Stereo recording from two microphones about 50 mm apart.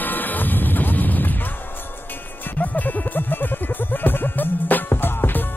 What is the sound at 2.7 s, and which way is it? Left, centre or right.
Music, left.